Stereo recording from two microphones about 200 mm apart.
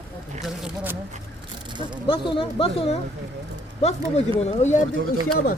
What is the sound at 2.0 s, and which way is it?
Speech, 25° left (ahead or behind).